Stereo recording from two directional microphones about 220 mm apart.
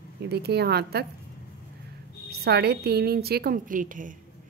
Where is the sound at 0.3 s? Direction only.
45° right (ahead or behind).